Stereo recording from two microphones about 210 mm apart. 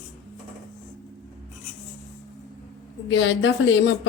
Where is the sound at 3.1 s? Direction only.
65° left (ahead or behind).